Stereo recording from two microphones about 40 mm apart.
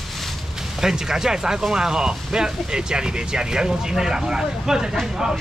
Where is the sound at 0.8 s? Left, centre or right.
Centre.